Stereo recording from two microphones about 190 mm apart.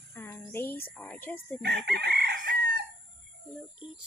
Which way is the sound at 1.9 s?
55° right (ahead or behind).